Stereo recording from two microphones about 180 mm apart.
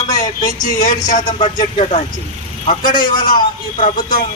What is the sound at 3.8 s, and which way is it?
Speech, 50° left (ahead or behind).